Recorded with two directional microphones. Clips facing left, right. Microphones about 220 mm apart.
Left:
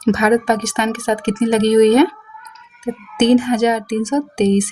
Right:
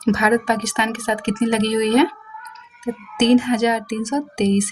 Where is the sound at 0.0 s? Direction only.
50° left (ahead or behind).